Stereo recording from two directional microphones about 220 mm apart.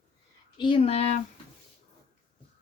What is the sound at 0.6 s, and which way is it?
Speech, 25° left (ahead or behind).